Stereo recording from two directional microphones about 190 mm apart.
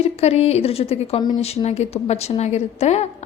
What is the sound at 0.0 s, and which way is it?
A woman's voice, 35° left (ahead or behind).